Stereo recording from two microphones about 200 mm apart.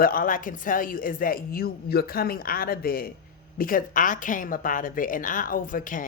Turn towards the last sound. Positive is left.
turn(degrees=40)  # may be behind; listen again after turning